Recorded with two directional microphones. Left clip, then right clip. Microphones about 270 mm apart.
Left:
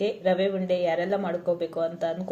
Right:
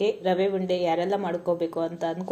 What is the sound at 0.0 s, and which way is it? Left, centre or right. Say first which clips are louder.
A woman's voice: even; centre.